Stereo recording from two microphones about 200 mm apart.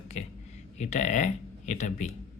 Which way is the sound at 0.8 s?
35° left (ahead or behind).